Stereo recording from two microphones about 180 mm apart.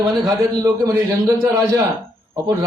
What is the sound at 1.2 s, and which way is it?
Speech, 20° right (ahead or behind).